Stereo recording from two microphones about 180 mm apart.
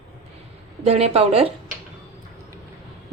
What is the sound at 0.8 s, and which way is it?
Speech, 35° right (ahead or behind).